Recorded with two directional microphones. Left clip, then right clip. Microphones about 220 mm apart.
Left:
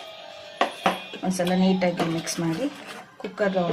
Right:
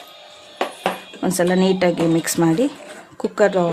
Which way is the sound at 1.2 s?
55° right (ahead or behind).